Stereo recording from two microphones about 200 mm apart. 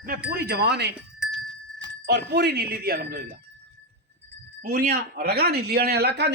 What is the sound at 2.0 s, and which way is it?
Speech, 55° right (ahead or behind).